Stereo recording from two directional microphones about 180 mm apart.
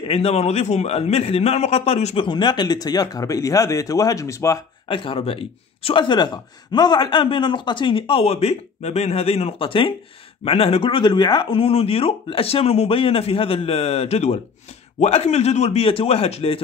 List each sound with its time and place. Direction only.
0.1 s speech: 35° left (ahead or behind)
2.2 s speech: 25° left (ahead or behind)
4.8 s speech: 30° left (ahead or behind)